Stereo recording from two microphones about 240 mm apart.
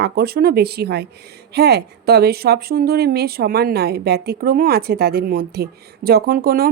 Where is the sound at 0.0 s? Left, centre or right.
Right.